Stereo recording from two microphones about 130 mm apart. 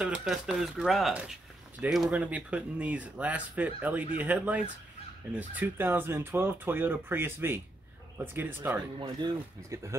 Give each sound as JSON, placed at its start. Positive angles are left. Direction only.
{"t": 0.0, "sound": "speech", "side_deg": -5}